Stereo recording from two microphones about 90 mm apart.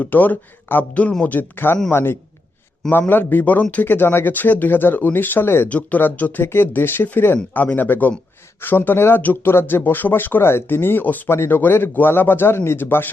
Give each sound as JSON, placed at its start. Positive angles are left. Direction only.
{"t": 0.0, "sound": "speech", "side_deg": 20}